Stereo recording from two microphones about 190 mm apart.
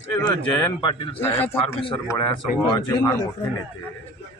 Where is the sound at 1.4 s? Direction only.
30° left (ahead or behind).